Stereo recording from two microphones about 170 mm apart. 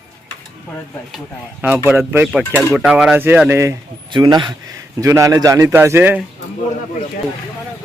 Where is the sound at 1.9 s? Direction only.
10° right (ahead or behind).